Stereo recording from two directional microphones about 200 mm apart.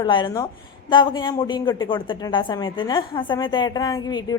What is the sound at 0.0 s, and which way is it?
Speech, 25° left (ahead or behind).